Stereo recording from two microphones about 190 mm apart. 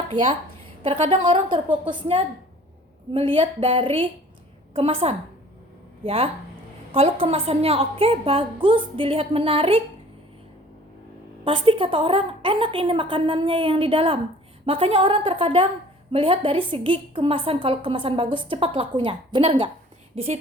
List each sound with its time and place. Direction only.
0.1 s a woman's voice: 25° right (ahead or behind)
11.4 s a woman's voice: 30° right (ahead or behind)